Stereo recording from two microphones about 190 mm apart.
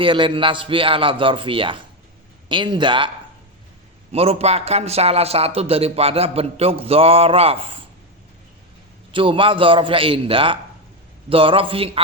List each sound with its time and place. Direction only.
0.0 s speech: 25° right (ahead or behind)
4.1 s a man's voice: 30° right (ahead or behind)
9.1 s speech: 25° right (ahead or behind)